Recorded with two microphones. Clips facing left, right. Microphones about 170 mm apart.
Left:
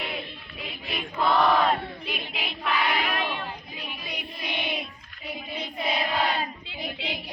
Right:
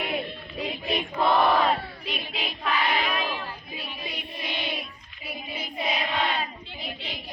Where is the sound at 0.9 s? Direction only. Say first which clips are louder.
Right 1 dB; 20° right (ahead or behind).